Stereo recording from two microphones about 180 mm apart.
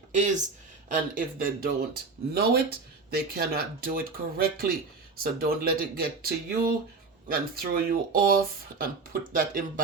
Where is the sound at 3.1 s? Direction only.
60° right (ahead or behind).